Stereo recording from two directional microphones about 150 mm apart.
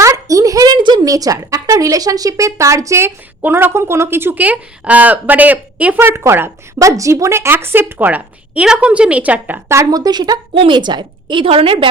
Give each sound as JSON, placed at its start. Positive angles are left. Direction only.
{"t": 0.0, "sound": "a woman's voice", "side_deg": -20}